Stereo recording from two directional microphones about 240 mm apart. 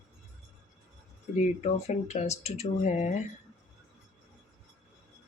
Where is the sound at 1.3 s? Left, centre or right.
Left.